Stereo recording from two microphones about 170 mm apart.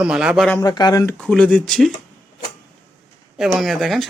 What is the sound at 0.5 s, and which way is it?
Speech, 20° left (ahead or behind).